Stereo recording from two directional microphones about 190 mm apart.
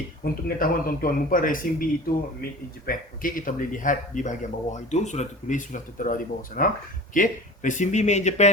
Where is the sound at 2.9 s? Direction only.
45° left (ahead or behind).